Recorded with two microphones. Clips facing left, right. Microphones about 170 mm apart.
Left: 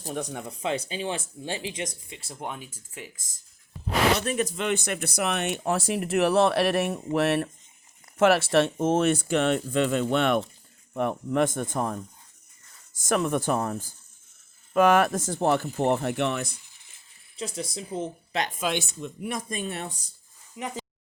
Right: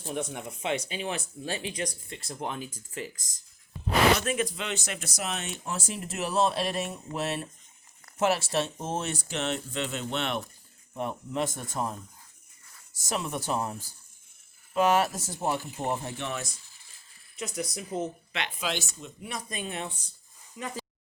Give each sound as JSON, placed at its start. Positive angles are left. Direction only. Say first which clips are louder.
{"t": 0.0, "sound": "speech", "louder": "left 1 dB", "side_deg": 40}
{"t": 2.0, "sound": "speech", "louder": "right 1 dB", "side_deg": 5}
{"t": 4.2, "sound": "speech", "louder": "left 3 dB", "side_deg": 40}
{"t": 17.3, "sound": "speech", "louder": "left 1 dB", "side_deg": 30}
{"t": 18.3, "sound": "speech", "louder": "left 6 dB", "side_deg": 45}
{"t": 20.6, "sound": "speech", "louder": "left 3 dB", "side_deg": 20}